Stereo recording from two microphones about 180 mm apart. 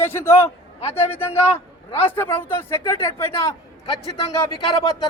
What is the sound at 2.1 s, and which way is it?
A man's voice, 10° left (ahead or behind).